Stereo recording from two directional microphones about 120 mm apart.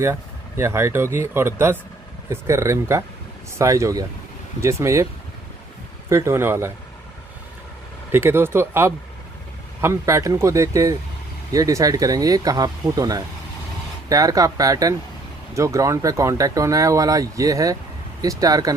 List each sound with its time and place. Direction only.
0.0 s speech: 20° right (ahead or behind)
6.0 s speech: 20° right (ahead or behind)
8.1 s speech: 20° right (ahead or behind)